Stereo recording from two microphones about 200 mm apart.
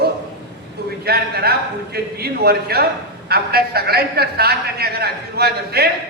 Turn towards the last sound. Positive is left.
turn(degrees=-50)  # may be behind; listen again after turning